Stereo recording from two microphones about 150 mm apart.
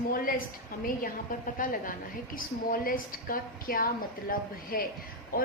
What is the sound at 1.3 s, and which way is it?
A woman's voice, 65° left (ahead or behind).